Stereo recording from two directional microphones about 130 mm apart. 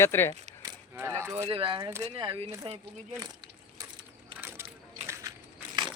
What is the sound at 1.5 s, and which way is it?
Speech, 40° right (ahead or behind).